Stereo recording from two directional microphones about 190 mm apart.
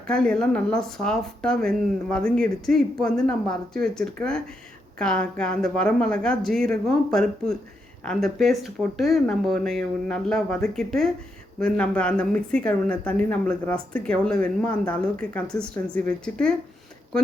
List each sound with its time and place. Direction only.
0.1 s speech: 5° left (ahead or behind)